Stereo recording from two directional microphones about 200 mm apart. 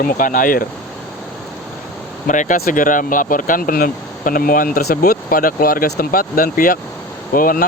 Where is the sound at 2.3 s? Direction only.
40° left (ahead or behind).